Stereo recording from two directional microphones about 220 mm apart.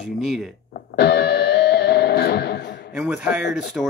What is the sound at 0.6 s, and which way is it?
Music, 45° left (ahead or behind).